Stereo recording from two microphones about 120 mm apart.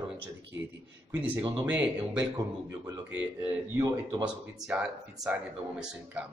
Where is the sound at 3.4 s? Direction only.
20° right (ahead or behind).